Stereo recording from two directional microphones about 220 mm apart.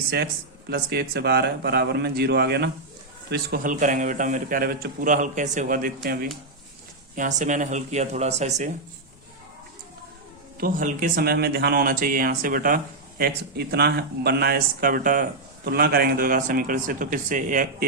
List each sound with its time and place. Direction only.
0.7 s a man's voice: 45° right (ahead or behind)
10.6 s speech: 35° right (ahead or behind)